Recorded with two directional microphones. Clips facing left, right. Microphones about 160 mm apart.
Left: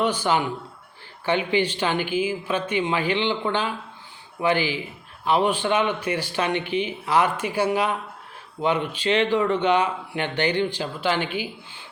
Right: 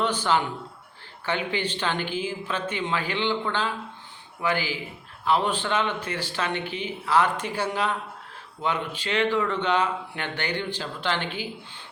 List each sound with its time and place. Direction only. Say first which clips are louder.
0.0 s a man's voice: left 2 dB; 10° left (ahead or behind)